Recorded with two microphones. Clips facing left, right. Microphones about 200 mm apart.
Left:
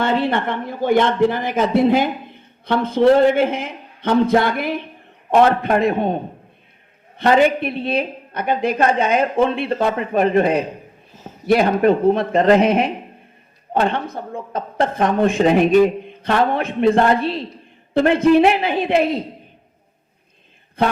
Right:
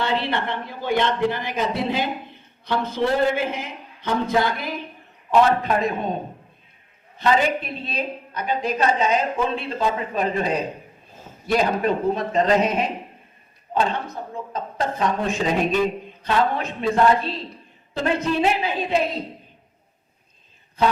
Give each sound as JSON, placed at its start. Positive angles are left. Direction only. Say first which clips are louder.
{"t": 0.0, "sound": "a man's voice", "louder": "left 5 dB", "side_deg": 50}
{"t": 7.2, "sound": "a man's voice", "louder": "left 6 dB", "side_deg": 60}